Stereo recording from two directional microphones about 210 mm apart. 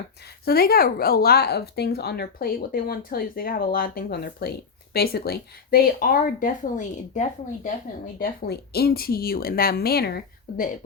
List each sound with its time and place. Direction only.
0.4 s speech: 45° left (ahead or behind)
8.2 s speech: 45° left (ahead or behind)